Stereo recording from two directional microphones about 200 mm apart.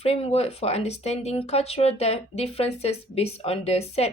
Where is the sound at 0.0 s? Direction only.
30° left (ahead or behind).